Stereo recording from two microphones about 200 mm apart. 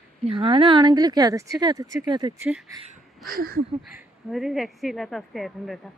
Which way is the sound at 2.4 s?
5° right (ahead or behind).